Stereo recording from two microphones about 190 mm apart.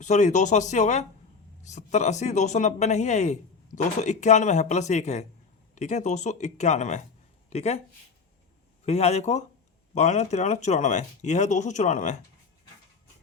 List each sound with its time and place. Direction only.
0.0 s speech: 40° left (ahead or behind)
8.8 s speech: 35° left (ahead or behind)